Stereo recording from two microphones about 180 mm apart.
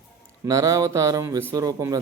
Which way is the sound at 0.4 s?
20° right (ahead or behind).